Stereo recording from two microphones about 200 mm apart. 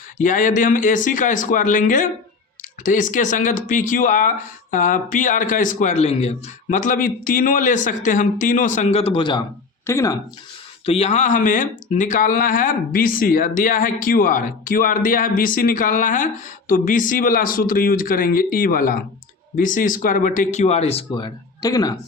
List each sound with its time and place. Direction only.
0.2 s speech: 40° left (ahead or behind); by 9.4 s 25° left (ahead or behind)
9.8 s speech: 15° left (ahead or behind)
10.8 s speech: 30° left (ahead or behind)